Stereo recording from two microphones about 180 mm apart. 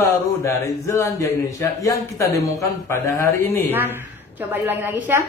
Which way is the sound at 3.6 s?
10° right (ahead or behind).